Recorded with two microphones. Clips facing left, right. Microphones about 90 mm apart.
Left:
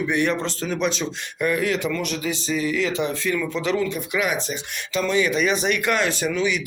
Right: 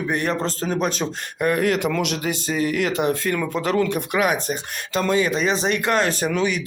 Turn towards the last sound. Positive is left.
turn(degrees=-45)  # may be behind; listen again after turning